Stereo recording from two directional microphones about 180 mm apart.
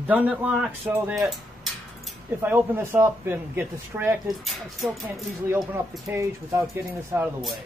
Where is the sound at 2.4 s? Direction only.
10° right (ahead or behind).